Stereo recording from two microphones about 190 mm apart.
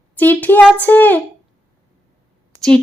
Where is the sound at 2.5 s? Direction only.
15° right (ahead or behind).